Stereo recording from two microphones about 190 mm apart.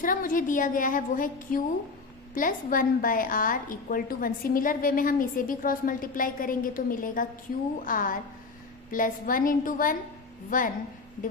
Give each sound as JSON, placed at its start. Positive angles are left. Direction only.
{"t": 0.0, "sound": "a woman's voice", "side_deg": 45}